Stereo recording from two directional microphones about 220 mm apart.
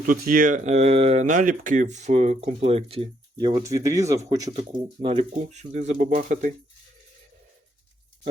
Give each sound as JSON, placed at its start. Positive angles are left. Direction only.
{"t": 0.0, "sound": "speech", "side_deg": -40}
{"t": 3.4, "sound": "speech", "side_deg": -15}